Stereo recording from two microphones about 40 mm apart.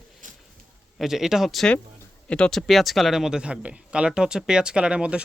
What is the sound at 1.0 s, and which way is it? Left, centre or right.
Speech, centre.